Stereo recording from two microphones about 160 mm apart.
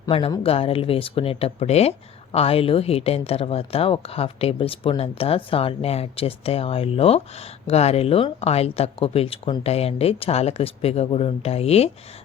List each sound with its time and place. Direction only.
0.1 s speech: 35° left (ahead or behind)